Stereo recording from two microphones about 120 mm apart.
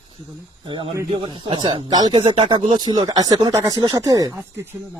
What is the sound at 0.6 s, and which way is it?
Speech, 45° right (ahead or behind).